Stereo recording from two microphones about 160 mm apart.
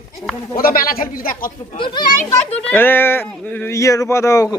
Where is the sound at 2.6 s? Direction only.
10° left (ahead or behind).